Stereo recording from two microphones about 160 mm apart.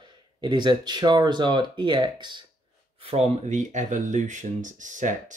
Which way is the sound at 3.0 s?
40° right (ahead or behind).